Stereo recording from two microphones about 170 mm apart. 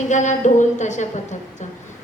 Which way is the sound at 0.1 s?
45° left (ahead or behind).